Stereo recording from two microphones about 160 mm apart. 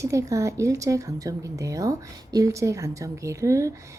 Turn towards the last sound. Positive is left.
turn(degrees=-20)  # may be behind; listen again after turning